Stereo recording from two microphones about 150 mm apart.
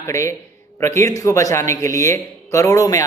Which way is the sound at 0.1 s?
20° left (ahead or behind).